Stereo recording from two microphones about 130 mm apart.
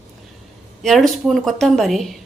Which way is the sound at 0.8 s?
Centre (ahead or behind).